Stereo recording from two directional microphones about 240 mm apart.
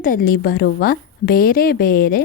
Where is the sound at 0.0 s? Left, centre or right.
Left.